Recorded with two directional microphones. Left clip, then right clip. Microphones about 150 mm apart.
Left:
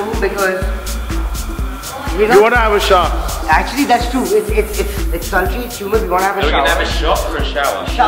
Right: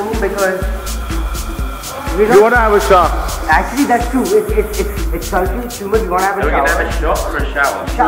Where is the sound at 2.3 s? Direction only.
15° left (ahead or behind).